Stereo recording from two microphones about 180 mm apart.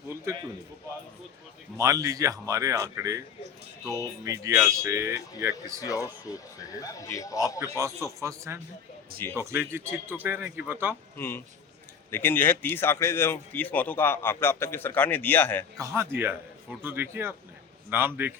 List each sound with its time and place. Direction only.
1.7 s a man's voice: 15° right (ahead or behind)
5.8 s a man's voice: 20° left (ahead or behind)
7.8 s a man's voice: 15° right (ahead or behind)
11.2 s a man's voice: 10° left (ahead or behind)
15.8 s a man's voice: 15° right (ahead or behind)